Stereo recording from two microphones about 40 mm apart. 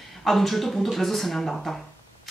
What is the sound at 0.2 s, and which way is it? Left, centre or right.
Speech, centre.